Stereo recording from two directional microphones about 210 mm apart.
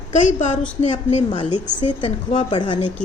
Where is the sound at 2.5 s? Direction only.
20° left (ahead or behind).